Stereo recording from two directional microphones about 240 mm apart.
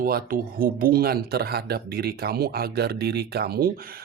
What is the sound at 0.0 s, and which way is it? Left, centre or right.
Speech, right.